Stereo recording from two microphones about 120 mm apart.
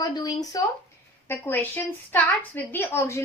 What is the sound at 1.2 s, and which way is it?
A woman's voice, 15° left (ahead or behind).